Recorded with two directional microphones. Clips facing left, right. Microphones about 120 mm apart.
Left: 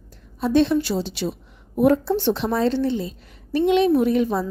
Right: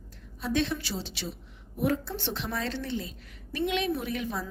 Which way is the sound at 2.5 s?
30° left (ahead or behind).